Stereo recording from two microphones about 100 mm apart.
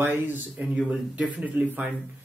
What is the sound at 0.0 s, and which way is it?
Speech, 20° right (ahead or behind).